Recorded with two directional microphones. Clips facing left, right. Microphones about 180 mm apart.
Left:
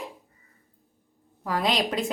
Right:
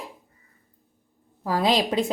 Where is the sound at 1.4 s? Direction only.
30° right (ahead or behind).